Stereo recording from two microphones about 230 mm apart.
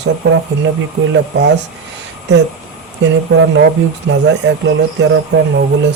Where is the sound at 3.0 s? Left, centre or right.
Right.